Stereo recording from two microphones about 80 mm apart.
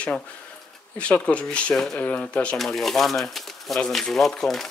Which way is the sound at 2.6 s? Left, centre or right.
Centre.